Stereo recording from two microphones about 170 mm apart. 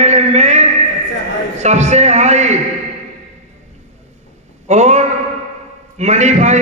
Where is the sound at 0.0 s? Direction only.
40° right (ahead or behind).